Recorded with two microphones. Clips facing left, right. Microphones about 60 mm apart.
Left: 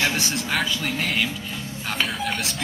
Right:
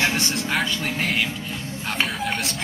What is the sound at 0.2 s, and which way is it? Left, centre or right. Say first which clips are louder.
Speech: right 1 dB; centre.